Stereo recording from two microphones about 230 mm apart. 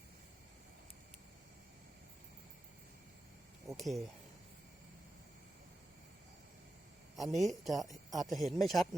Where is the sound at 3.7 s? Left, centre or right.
Centre.